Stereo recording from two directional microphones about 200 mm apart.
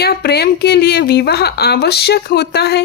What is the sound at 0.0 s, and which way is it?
A woman's voice, 50° left (ahead or behind).